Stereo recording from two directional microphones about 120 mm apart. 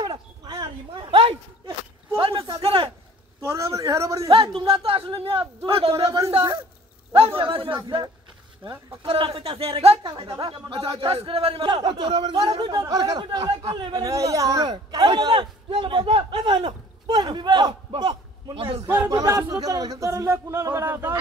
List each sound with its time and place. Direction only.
0.0 s a sound: 35° right (ahead or behind)
2.1 s a man's voice: 45° right (ahead or behind)
3.3 s speech: 25° right (ahead or behind)
4.6 s a man's voice: 50° right (ahead or behind)
7.3 s a man's voice: 50° right (ahead or behind)
9.0 s a man's voice: 50° right (ahead or behind)
10.0 s a man's voice: 40° right (ahead or behind)
18.5 s a man's voice: 50° right (ahead or behind)
19.0 s speech: 30° right (ahead or behind)